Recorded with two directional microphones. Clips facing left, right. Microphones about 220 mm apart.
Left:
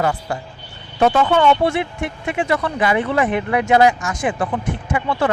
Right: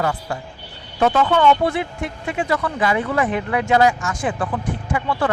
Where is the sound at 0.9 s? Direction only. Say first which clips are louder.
Left 2 dB; 25° left (ahead or behind).